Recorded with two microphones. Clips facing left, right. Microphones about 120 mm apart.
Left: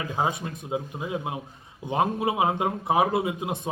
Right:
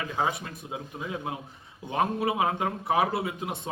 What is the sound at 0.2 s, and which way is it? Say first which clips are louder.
Speech: left 2 dB; 25° left (ahead or behind).